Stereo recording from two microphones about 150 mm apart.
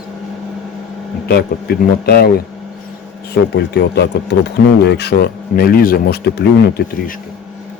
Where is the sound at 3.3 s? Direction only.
90° left.